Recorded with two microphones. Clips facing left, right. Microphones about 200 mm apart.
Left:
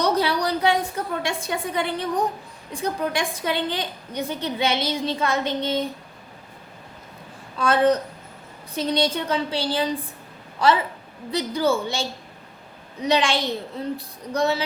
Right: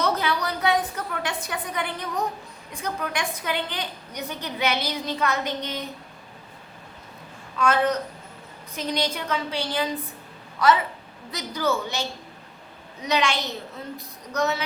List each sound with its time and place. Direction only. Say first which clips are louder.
0.0 s a sound: left 4 dB; 35° left (ahead or behind)
2.7 s a woman's voice: left 5 dB; 30° left (ahead or behind)
7.6 s a woman's voice: left 3 dB; 30° left (ahead or behind)